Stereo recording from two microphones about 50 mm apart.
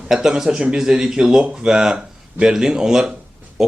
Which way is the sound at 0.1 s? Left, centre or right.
Centre.